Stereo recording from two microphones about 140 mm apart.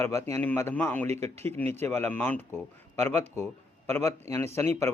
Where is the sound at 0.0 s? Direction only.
20° left (ahead or behind).